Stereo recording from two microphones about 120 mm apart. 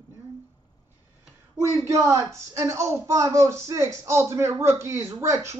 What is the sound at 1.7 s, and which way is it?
Speech, 25° right (ahead or behind).